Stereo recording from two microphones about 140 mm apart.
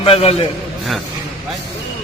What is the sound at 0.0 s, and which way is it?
Speech, 45° left (ahead or behind).